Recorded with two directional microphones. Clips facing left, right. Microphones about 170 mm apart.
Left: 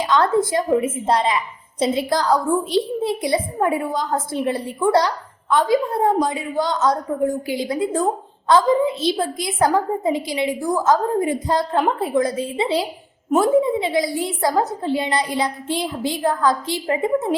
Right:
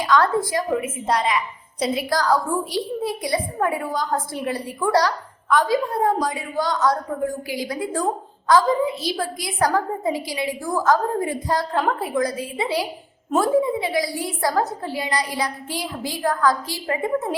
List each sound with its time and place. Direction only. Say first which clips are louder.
0.0 s a woman's voice: left 2 dB; 20° left (ahead or behind)